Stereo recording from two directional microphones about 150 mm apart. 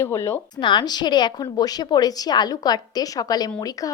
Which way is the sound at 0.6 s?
30° left (ahead or behind).